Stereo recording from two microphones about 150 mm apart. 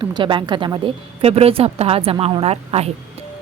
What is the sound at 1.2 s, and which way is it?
A woman's voice, 40° right (ahead or behind).